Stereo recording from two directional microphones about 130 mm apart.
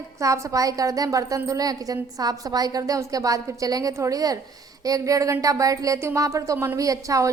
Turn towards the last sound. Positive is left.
turn(degrees=-25)  # may be behind; listen again after turning